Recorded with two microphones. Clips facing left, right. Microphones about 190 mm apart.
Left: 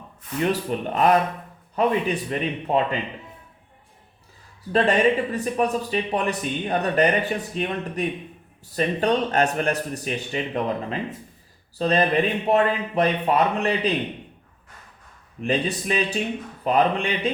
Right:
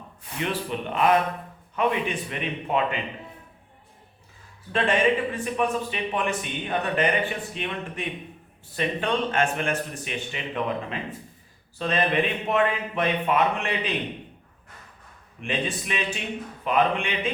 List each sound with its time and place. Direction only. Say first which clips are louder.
0.4 s speech: left 5 dB; 40° left (ahead or behind)
4.7 s speech: left 3 dB; 40° left (ahead or behind)
15.4 s speech: left 5 dB; 35° left (ahead or behind)